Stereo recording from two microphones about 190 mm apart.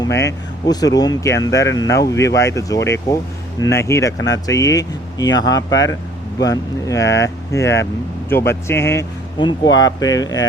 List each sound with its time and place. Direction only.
0.0 s speech: 15° left (ahead or behind)